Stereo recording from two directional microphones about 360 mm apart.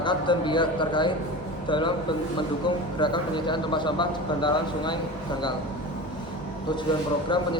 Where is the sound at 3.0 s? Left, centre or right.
Centre.